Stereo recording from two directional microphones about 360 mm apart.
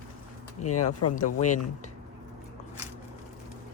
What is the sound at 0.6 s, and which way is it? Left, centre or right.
Speech, left.